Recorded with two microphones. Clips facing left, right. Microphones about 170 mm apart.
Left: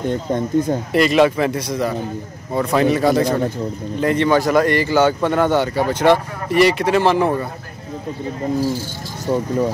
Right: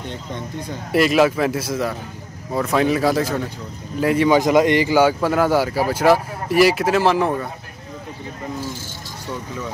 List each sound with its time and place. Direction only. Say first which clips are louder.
0.0 s speech: left 10 dB; 50° left (ahead or behind)
0.9 s speech: left 1 dB; 5° right (ahead or behind)
9.3 s speech: left 11 dB; 40° left (ahead or behind)